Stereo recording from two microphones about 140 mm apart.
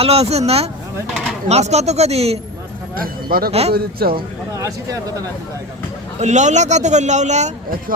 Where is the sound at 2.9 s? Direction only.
90° right.